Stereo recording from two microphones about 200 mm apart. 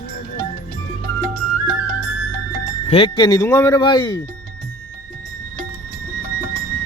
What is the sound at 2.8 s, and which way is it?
Speech, 30° left (ahead or behind).